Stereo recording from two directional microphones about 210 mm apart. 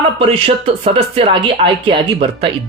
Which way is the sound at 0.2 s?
25° right (ahead or behind).